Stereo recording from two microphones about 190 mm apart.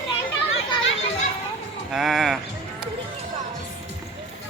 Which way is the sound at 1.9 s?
Centre (ahead or behind).